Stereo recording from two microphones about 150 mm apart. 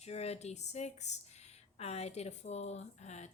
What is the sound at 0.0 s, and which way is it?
Speech, 45° left (ahead or behind).